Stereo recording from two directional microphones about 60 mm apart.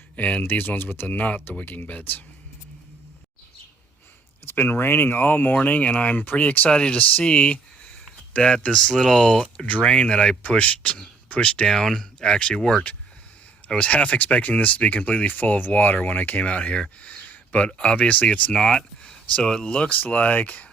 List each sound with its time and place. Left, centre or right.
0.2 s speech: left
0.4 s speech: left
4.4 s speech: left
6.7 s speech: centre
13.7 s speech: left
16.5 s speech: centre
18.5 s speech: centre; by 20.7 s left